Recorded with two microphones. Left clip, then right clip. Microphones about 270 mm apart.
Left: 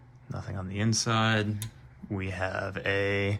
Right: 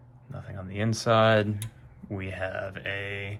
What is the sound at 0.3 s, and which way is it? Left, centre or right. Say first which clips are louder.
Speech: left 2 dB; centre.